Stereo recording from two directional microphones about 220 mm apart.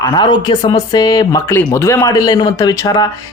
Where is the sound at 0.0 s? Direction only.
20° left (ahead or behind).